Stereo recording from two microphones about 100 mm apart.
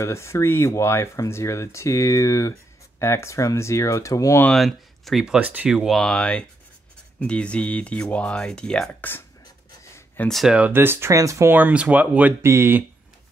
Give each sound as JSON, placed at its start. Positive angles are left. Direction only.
{"t": 0.0, "sound": "speech", "side_deg": 30}
{"t": 4.5, "sound": "speech", "side_deg": 0}
{"t": 5.7, "sound": "speech", "side_deg": -5}
{"t": 10.2, "sound": "speech", "side_deg": 0}
{"t": 10.5, "sound": "speech", "side_deg": -20}
{"t": 11.5, "sound": "speech", "side_deg": -15}